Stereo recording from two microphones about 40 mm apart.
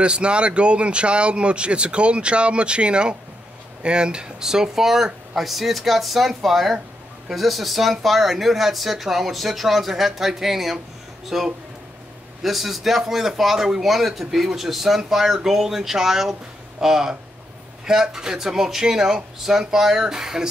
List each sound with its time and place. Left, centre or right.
0.0 s speech: right